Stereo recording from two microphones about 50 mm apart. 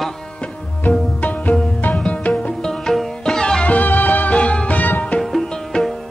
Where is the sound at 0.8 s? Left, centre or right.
Left.